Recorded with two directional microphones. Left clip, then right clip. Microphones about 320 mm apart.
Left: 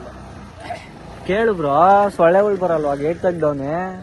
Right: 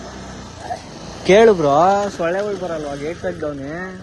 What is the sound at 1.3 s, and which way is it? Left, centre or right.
Speech, centre.